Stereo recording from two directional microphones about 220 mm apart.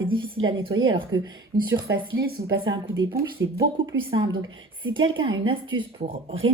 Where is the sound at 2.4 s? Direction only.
20° right (ahead or behind).